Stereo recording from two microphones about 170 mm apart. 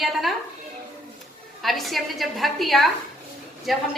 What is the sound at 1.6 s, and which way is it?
A woman's voice, centre (ahead or behind).